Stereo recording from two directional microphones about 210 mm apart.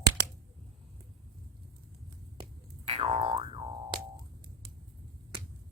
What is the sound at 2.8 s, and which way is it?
Boing, 30° right (ahead or behind).